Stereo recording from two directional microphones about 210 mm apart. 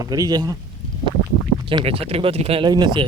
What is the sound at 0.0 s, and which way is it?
Speech, 15° right (ahead or behind).